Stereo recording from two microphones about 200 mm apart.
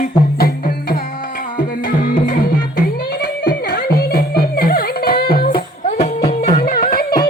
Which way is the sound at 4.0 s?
50° left (ahead or behind).